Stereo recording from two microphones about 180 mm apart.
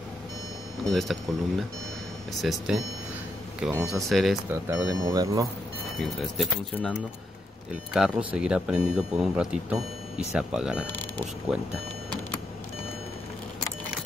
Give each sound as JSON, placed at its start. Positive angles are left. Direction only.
{"t": 0.8, "sound": "speech", "side_deg": 0}
{"t": 2.4, "sound": "speech", "side_deg": 0}
{"t": 4.5, "sound": "speech", "side_deg": -15}
{"t": 5.9, "sound": "speech", "side_deg": 0}
{"t": 10.9, "sound": "speech", "side_deg": 10}
{"t": 11.5, "sound": "speech", "side_deg": -5}